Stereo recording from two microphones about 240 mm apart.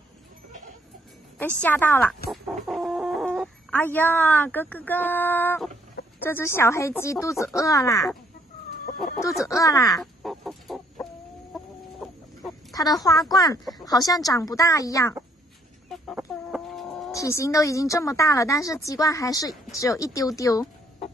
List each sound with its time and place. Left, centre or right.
1.4 s speech: centre
2.3 s chicken: centre
3.7 s speech: centre
9.4 s speech: centre
10.2 s chicken: centre
12.7 s speech: centre
15.9 s chicken: centre
17.1 s speech: centre